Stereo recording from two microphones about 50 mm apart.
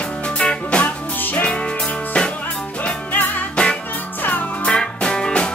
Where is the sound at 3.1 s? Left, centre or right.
Left.